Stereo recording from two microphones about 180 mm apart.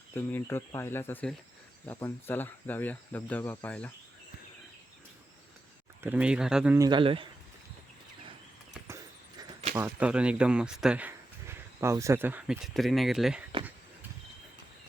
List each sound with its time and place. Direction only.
0.1 s speech: 10° left (ahead or behind)
6.0 s speech: 10° right (ahead or behind)
6.7 s a man's voice: 25° right (ahead or behind)
9.7 s speech: 5° right (ahead or behind)